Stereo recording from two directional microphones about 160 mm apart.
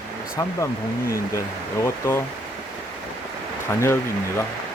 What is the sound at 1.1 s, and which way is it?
Speech, 20° left (ahead or behind).